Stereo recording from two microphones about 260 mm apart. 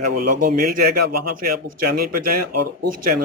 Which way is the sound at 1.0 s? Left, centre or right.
Right.